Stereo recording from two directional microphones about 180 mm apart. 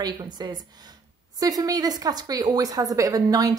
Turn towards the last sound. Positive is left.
turn(degrees=-20)  # may be behind; listen again after turning